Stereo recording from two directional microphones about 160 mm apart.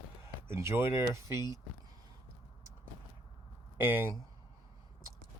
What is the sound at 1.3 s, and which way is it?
Speech, 25° left (ahead or behind).